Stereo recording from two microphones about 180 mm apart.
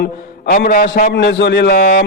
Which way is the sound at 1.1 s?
70° left (ahead or behind).